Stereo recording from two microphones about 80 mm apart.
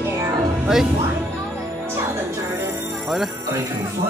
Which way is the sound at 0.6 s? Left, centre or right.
Centre.